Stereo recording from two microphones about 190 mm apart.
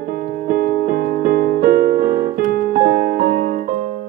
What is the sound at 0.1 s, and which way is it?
Music, 55° right (ahead or behind).